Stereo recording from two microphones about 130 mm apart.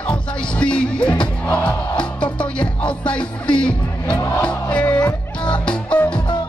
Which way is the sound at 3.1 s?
10° left (ahead or behind).